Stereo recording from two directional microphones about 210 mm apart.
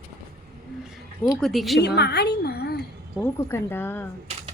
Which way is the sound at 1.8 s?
50° left (ahead or behind).